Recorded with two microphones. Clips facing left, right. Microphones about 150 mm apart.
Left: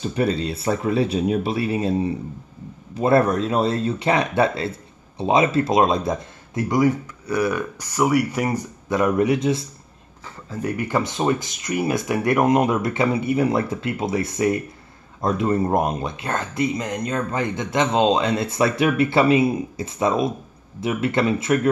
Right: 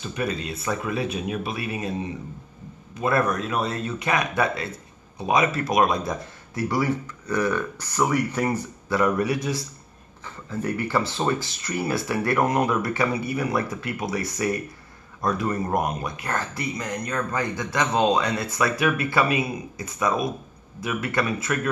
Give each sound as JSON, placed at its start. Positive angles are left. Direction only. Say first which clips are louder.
{"t": 0.0, "sound": "speech", "louder": "left 6 dB", "side_deg": 30}